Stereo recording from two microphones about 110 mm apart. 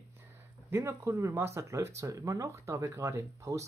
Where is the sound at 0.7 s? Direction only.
25° right (ahead or behind).